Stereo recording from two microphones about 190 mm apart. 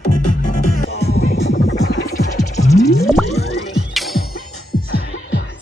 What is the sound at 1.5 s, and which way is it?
Music, 90° left.